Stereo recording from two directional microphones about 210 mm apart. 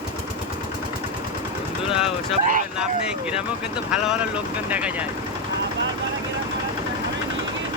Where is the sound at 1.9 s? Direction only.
Centre (ahead or behind).